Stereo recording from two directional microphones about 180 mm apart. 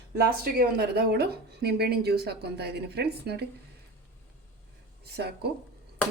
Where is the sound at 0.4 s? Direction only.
60° right (ahead or behind).